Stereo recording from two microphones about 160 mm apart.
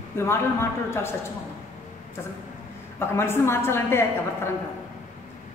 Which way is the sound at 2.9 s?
15° left (ahead or behind).